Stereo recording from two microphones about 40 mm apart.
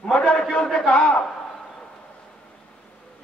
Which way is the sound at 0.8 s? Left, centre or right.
Left.